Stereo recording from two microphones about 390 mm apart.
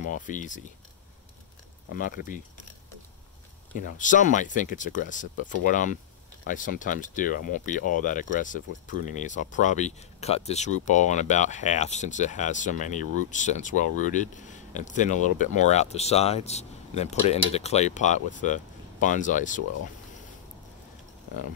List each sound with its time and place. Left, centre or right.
0.0 s speech: centre
1.9 s speech: left
3.7 s speech: centre